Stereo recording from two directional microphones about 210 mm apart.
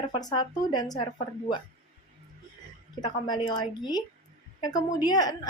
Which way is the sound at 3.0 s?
20° left (ahead or behind).